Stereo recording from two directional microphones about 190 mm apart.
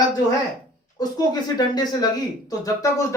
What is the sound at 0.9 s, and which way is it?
Speech, 20° left (ahead or behind).